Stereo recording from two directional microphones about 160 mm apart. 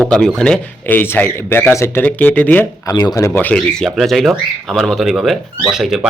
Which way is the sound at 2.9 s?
20° left (ahead or behind).